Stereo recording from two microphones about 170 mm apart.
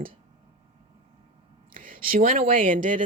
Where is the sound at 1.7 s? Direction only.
55° right (ahead or behind).